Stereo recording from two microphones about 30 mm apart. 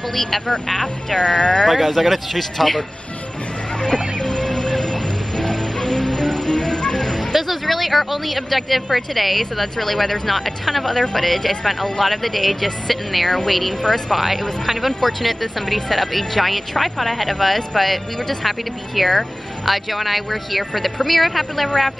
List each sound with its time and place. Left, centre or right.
0.1 s speech: centre
1.1 s speech: left
1.7 s speech: centre
3.8 s music: left
7.0 s music: centre
7.3 s speech: centre
15.0 s speech: centre